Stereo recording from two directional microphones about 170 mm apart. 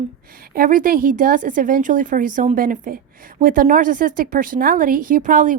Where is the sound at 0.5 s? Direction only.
55° right (ahead or behind).